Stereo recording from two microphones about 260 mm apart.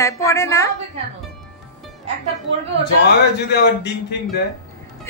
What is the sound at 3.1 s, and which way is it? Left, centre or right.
Speech, left.